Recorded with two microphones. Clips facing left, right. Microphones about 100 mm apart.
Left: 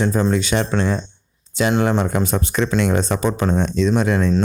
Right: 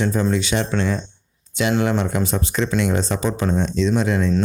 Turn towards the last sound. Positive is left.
turn(degrees=55)  # may be behind; listen again after turning